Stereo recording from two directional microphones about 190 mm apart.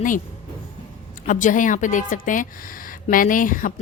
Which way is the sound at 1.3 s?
40° left (ahead or behind).